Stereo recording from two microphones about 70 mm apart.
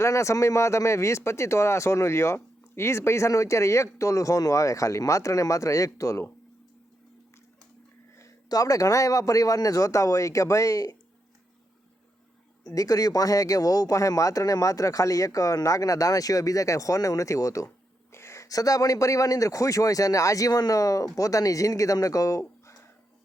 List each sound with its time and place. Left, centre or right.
0.0 s speech: left
8.4 s speech: left
12.7 s speech: left